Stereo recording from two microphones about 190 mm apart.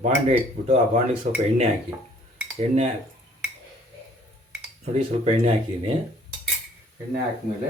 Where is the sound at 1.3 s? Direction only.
45° right (ahead or behind).